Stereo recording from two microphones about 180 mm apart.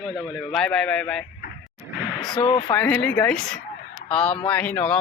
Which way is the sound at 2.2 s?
25° left (ahead or behind).